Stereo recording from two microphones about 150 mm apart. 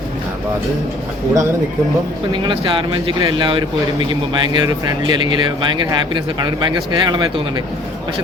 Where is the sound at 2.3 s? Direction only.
35° right (ahead or behind).